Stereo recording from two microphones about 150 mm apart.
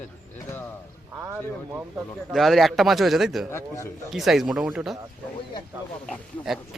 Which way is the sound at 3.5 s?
15° left (ahead or behind).